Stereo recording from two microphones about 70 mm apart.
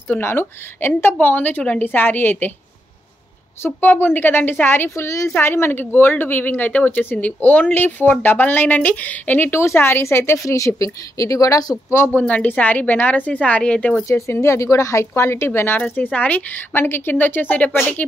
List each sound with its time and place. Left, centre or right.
0.2 s a woman's voice: left
3.6 s a woman's voice: left
5.4 s a woman's voice: left
9.5 s a woman's voice: left
11.9 s a woman's voice: left
14.0 s a woman's voice: left
15.8 s a woman's voice: left